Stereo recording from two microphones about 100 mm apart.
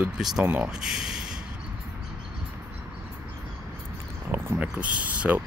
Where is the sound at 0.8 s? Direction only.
5° right (ahead or behind).